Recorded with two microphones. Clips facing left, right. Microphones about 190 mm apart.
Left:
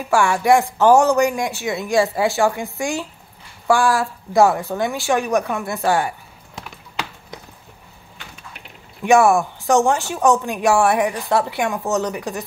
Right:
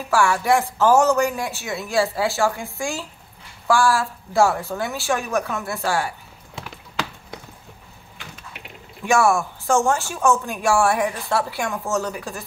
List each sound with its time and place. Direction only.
0.1 s speech: 15° left (ahead or behind)
9.0 s a woman's voice: 20° left (ahead or behind)